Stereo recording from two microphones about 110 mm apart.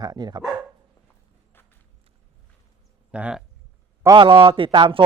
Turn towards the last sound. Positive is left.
turn(degrees=-50)  # may be behind; listen again after turning